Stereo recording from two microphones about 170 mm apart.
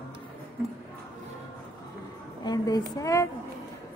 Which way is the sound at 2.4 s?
20° left (ahead or behind).